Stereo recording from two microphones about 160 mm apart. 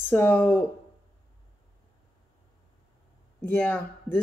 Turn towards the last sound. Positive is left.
turn(degrees=15)  # may be behind; listen again after turning